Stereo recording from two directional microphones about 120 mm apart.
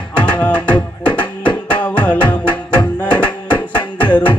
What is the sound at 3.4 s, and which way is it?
Music, 40° left (ahead or behind).